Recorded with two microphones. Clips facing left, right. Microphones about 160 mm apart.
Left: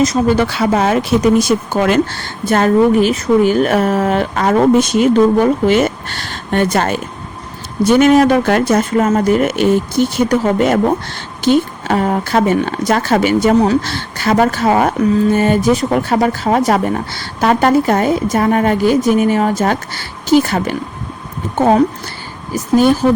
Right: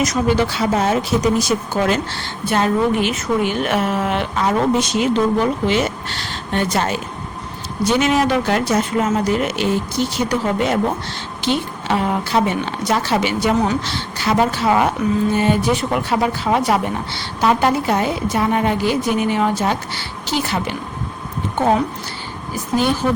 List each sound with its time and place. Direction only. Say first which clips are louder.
0.3 s speech: left 4 dB; 60° left (ahead or behind)
2.0 s speech: left 5 dB; 45° left (ahead or behind)